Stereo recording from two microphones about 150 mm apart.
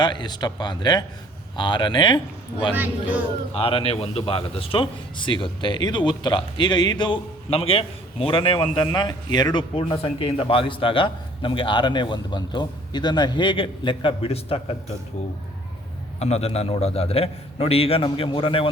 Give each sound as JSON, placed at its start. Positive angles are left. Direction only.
{"t": 0.0, "sound": "a man's voice", "side_deg": 30}
{"t": 2.7, "sound": "a man's voice", "side_deg": -10}
{"t": 3.5, "sound": "a man's voice", "side_deg": 40}
{"t": 16.2, "sound": "a man's voice", "side_deg": 45}